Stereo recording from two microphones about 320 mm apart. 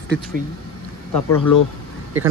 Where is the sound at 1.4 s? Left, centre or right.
Left.